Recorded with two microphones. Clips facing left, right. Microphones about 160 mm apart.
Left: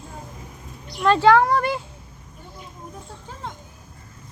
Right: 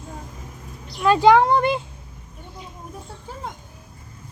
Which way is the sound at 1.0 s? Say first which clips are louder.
Right 1 dB; 15° right (ahead or behind).